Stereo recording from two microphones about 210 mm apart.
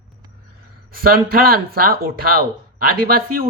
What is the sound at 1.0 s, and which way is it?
Speech, 45° right (ahead or behind).